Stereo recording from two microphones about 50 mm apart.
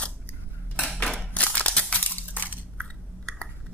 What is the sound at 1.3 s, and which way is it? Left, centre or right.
Crumpling, left.